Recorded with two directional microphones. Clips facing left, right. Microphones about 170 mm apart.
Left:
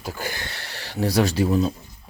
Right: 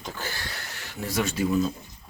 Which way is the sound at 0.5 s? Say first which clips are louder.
Left 2 dB; 30° left (ahead or behind).